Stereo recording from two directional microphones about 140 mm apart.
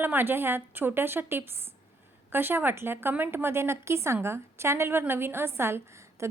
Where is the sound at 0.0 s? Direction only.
15° right (ahead or behind).